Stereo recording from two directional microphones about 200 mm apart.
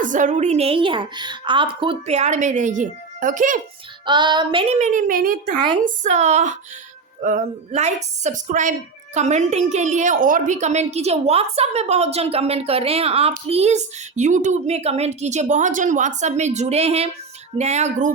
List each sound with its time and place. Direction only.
0.0 s a woman's voice: 40° right (ahead or behind)
4.0 s a woman's voice: 20° right (ahead or behind)